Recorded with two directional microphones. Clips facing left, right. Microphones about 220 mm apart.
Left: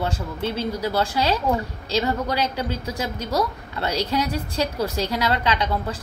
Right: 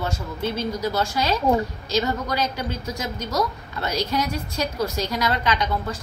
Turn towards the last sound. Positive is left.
turn(degrees=30)  # may be behind; listen again after turning